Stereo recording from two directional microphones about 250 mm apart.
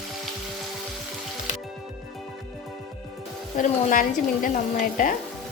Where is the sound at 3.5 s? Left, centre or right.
Left.